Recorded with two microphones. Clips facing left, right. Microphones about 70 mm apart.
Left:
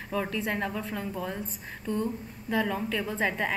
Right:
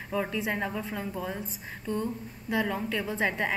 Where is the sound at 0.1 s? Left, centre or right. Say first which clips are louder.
Even; centre.